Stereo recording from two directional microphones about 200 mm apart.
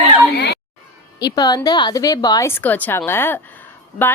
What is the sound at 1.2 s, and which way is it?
A woman's voice, 20° left (ahead or behind).